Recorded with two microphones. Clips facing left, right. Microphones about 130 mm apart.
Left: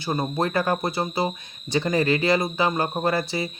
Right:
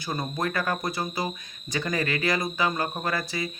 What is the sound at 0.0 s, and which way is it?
Speech, 30° left (ahead or behind).